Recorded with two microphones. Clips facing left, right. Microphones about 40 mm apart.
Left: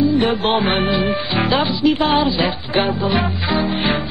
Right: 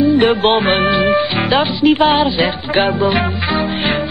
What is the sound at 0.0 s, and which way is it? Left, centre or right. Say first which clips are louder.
Music: right 4 dB; right.